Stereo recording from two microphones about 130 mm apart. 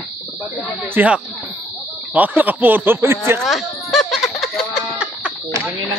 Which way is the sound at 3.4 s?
Centre (ahead or behind).